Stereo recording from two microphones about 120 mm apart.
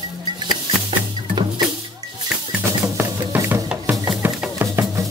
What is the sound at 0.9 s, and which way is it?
Music, 40° right (ahead or behind).